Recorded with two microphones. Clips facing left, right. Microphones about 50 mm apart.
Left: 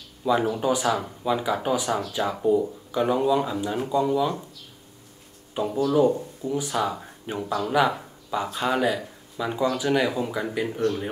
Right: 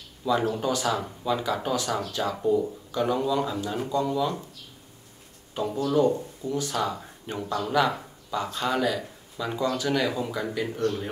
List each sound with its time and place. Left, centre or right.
0.2 s speech: centre
5.5 s speech: centre